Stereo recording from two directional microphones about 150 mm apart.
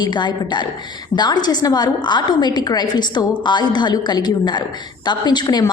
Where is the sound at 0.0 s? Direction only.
30° left (ahead or behind).